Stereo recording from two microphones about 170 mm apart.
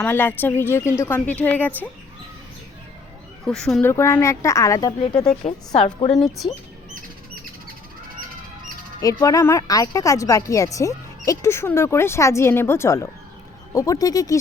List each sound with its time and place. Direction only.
0.0 s speech: 10° left (ahead or behind)
3.4 s speech: 5° left (ahead or behind); by 5.3 s 20° left (ahead or behind)
6.0 s speech: 40° left (ahead or behind)
9.0 s speech: 20° left (ahead or behind)